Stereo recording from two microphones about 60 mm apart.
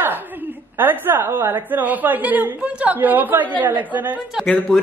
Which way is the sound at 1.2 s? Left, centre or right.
Right.